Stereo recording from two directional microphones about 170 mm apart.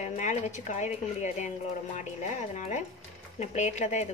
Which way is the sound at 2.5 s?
45° left (ahead or behind).